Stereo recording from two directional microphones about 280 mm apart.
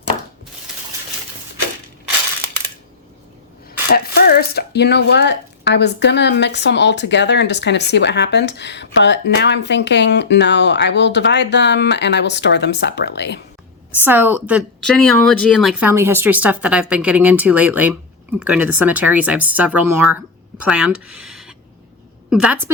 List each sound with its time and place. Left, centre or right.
3.8 s speech: left
14.0 s a woman's voice: centre